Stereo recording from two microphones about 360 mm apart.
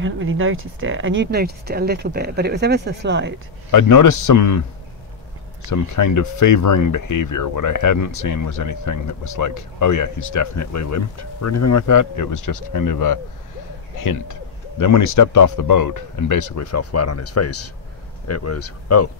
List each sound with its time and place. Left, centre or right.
0.0 s speech: right
3.7 s speech: left
5.7 s speech: left